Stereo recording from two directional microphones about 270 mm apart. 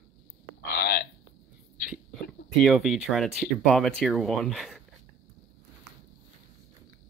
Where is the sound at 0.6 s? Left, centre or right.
Left.